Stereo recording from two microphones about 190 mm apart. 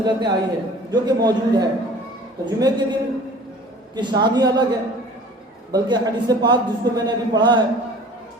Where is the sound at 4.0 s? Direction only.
25° right (ahead or behind).